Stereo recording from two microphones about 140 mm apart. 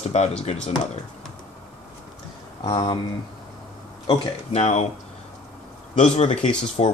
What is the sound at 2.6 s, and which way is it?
Speech, 30° left (ahead or behind).